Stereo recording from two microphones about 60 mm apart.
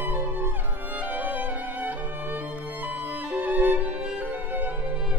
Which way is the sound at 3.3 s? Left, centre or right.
Right.